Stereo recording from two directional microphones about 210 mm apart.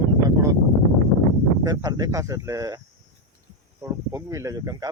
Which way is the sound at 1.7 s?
15° right (ahead or behind).